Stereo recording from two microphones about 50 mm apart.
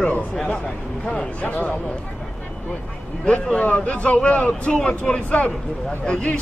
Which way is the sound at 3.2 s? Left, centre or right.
Left.